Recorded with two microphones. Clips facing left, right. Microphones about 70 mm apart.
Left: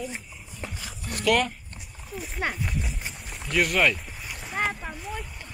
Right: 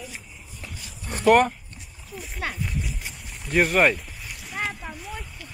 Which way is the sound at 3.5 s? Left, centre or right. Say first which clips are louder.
Right 3 dB; right.